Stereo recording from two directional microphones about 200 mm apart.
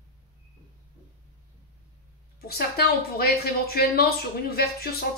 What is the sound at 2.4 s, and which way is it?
A woman's voice, 50° left (ahead or behind).